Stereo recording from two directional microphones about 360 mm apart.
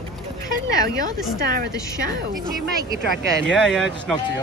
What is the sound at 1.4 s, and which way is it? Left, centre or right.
Speech, right.